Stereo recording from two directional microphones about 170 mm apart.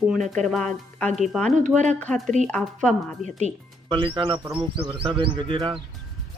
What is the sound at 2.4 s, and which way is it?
Speech, 5° left (ahead or behind).